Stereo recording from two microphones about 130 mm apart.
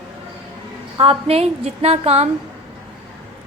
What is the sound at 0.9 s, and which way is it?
A woman's voice, 50° right (ahead or behind).